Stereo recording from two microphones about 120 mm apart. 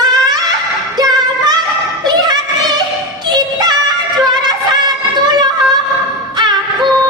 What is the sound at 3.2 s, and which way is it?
Music, 35° right (ahead or behind).